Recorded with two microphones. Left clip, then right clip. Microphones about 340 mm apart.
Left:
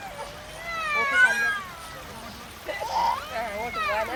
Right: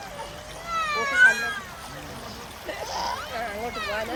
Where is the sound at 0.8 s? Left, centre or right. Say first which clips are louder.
Left 1 dB; centre.